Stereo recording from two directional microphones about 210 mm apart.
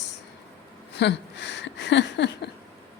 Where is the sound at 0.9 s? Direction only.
55° left (ahead or behind).